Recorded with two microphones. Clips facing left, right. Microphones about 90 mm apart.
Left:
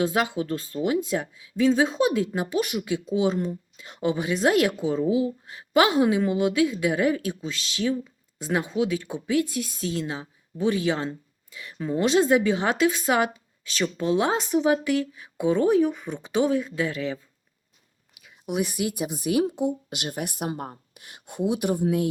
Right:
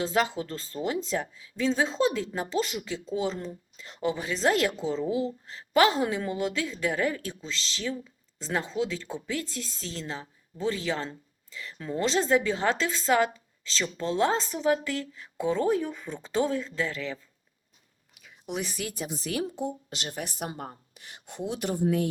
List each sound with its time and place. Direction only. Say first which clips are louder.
0.9 s speech: left 4 dB; 15° left (ahead or behind)
18.1 s whispering: left 5 dB; 10° left (ahead or behind)
18.7 s speech: left 6 dB; 15° left (ahead or behind)
20.5 s speech: left 6 dB; 50° left (ahead or behind)
21.4 s speech: left 4 dB; 15° left (ahead or behind)